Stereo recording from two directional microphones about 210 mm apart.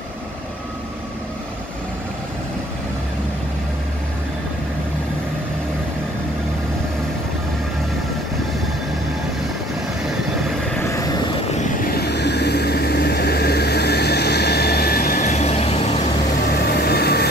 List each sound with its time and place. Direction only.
10.9 s vehicle: 15° left (ahead or behind)
11.5 s vehicle: 45° left (ahead or behind); by 15.9 s 30° left (ahead or behind)
16.6 s vehicle: 50° left (ahead or behind)